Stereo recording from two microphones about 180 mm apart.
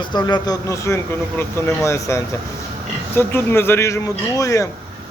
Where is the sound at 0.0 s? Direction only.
25° left (ahead or behind).